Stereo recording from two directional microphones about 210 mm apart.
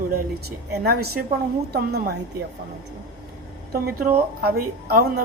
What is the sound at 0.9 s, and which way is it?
A woman's voice, 45° right (ahead or behind).